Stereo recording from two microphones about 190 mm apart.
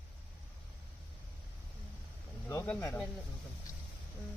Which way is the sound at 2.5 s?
15° left (ahead or behind).